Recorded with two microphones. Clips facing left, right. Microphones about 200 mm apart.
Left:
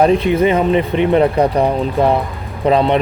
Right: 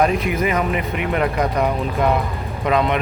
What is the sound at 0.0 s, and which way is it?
Speech, 30° left (ahead or behind).